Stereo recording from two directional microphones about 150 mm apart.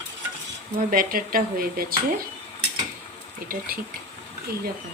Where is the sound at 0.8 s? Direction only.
65° right (ahead or behind).